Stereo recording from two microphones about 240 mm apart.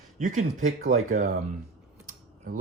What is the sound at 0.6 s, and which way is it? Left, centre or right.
Speech, right.